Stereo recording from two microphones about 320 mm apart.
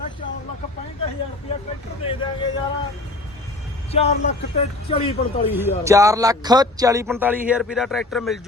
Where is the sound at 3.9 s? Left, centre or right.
Centre.